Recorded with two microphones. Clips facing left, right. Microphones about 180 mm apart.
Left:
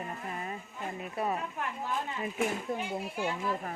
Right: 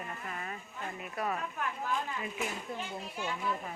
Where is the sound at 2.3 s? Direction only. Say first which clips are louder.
Left 6 dB; 50° left (ahead or behind).